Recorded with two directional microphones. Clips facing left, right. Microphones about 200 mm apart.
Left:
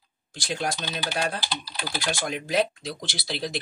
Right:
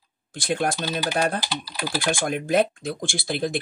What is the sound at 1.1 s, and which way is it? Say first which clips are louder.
Speech: right 3 dB; 50° right (ahead or behind).